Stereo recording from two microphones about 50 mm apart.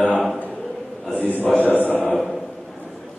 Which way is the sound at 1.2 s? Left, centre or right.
Left.